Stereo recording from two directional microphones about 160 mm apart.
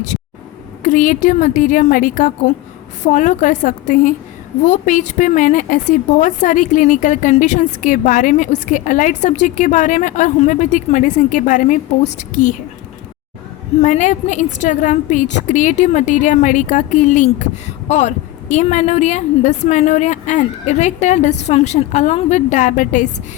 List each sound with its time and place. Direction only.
0.8 s a woman's voice: 55° left (ahead or behind)
13.8 s a woman's voice: 50° left (ahead or behind)